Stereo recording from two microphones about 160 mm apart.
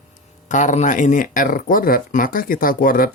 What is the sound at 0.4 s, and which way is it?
Speech, 50° left (ahead or behind).